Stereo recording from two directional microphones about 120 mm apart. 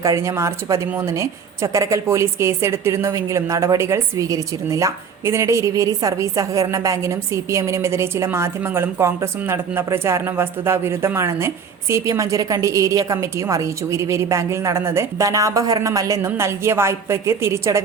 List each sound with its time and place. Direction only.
0.0 s a woman's voice: 25° right (ahead or behind)